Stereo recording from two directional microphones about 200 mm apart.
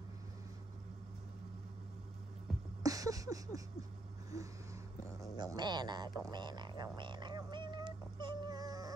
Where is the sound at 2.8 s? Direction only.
15° right (ahead or behind).